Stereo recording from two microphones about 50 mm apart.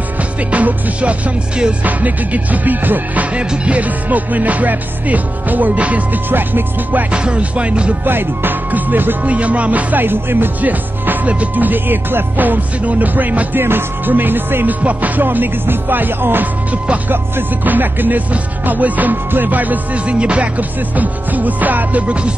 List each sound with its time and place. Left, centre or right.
0.5 s music: right
3.3 s music: right
6.3 s music: right
7.1 s music: right
8.0 s music: right
10.0 s music: right
13.6 s music: right
14.8 s music: right
16.7 s music: right
17.1 s music: right